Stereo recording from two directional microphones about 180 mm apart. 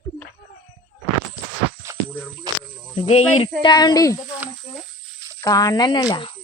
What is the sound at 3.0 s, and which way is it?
Speech, 35° left (ahead or behind).